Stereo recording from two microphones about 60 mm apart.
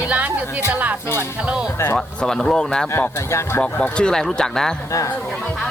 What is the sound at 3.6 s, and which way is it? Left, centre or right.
Speech, centre.